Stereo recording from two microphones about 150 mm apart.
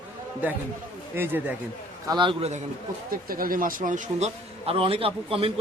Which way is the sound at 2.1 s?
35° right (ahead or behind).